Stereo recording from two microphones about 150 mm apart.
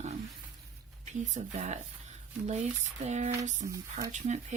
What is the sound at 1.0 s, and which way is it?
Speech, 50° right (ahead or behind).